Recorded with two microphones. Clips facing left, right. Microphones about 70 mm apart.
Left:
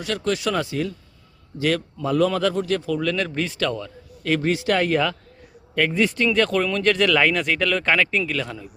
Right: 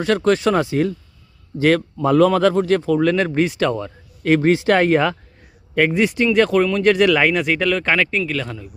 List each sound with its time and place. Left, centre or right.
0.0 s speech: right
1.5 s speech: right
5.9 s speech: centre